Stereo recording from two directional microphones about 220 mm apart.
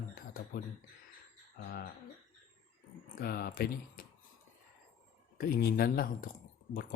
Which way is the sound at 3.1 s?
45° left (ahead or behind).